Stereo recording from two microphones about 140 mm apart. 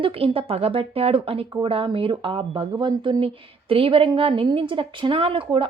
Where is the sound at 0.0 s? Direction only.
45° right (ahead or behind).